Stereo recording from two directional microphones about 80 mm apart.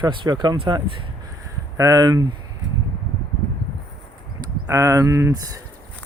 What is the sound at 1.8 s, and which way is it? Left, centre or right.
Speech, right.